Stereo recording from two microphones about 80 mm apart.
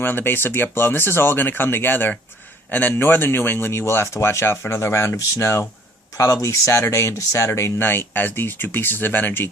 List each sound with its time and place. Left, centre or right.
0.0 s speech: left
7.9 s speech: left